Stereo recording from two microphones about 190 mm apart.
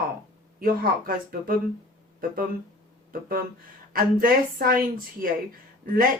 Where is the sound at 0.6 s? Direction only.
50° right (ahead or behind).